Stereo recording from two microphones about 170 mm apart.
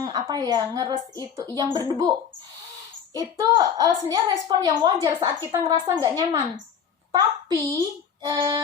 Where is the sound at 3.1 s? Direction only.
20° right (ahead or behind).